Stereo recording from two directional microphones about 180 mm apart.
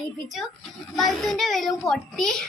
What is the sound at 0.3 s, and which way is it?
A child's voice, centre (ahead or behind).